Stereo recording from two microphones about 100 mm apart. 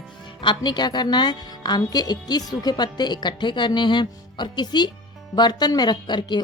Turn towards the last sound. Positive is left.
turn(degrees=45)  # may be behind; listen again after turning